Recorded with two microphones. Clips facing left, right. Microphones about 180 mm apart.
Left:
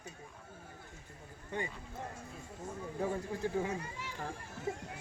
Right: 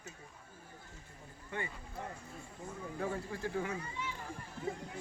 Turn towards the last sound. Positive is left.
turn(degrees=20)  # may be behind; listen again after turning